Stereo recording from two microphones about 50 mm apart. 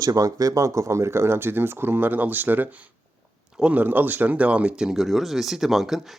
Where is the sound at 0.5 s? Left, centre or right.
Right.